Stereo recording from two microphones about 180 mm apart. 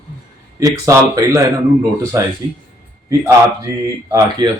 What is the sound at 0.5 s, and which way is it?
Speech, 20° right (ahead or behind).